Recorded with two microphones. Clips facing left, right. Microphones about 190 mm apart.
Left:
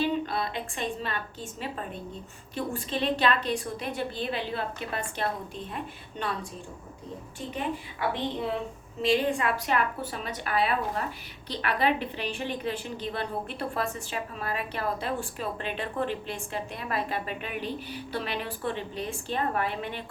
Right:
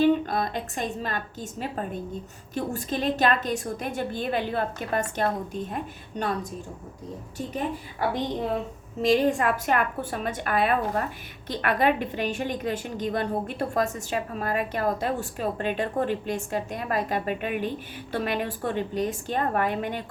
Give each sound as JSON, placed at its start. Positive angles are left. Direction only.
{"t": 0.0, "sound": "a woman's voice", "side_deg": -45}